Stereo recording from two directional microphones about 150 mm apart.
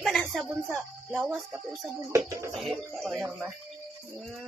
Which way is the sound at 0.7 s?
15° right (ahead or behind).